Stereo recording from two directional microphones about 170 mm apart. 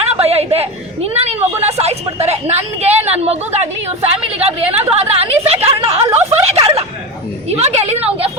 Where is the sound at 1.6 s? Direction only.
40° right (ahead or behind).